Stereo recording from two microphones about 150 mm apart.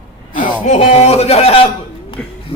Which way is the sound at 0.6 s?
45° left (ahead or behind).